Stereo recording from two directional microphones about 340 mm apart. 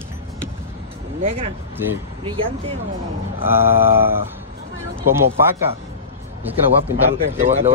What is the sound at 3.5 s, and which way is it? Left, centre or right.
Speech, centre.